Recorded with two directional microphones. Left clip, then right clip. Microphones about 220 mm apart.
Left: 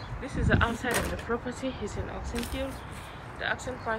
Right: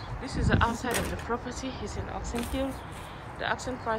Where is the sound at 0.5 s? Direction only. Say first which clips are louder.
Even; 5° right (ahead or behind).